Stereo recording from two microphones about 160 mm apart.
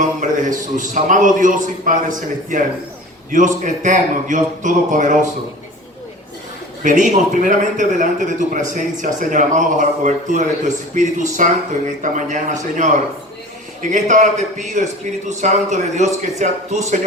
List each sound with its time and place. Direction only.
0.0 s a man's voice: 50° right (ahead or behind)
6.8 s a man's voice: 50° right (ahead or behind)